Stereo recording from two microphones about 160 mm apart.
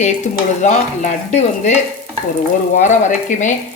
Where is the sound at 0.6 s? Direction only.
45° left (ahead or behind).